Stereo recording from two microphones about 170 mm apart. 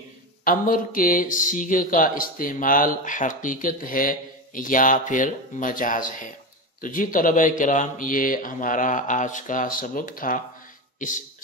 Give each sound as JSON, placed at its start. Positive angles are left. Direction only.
{"t": 0.5, "sound": "speech", "side_deg": 55}